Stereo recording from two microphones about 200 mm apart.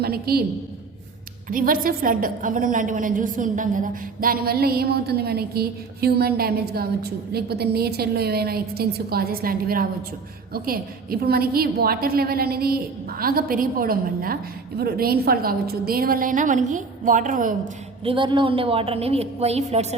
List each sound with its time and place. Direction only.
0.0 s a woman's voice: 50° right (ahead or behind)
1.5 s a woman's voice: 45° right (ahead or behind)
18.0 s a woman's voice: 25° right (ahead or behind)